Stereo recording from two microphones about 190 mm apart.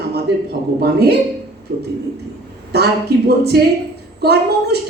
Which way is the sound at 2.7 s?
60° right (ahead or behind).